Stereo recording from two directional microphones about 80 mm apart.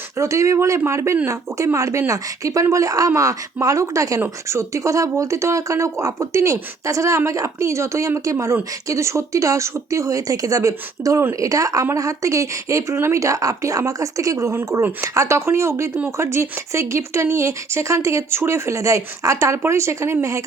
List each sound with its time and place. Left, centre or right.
0.2 s speech: right
11.2 s speech: right
11.4 s speech: right